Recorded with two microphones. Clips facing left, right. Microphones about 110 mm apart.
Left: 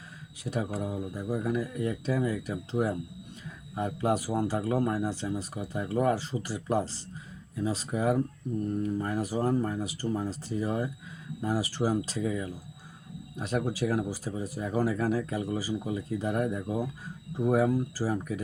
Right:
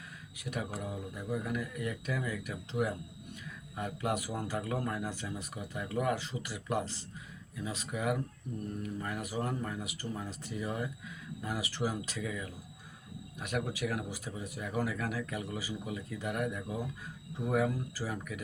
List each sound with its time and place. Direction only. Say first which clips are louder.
0.4 s speech: left 6 dB; 35° left (ahead or behind)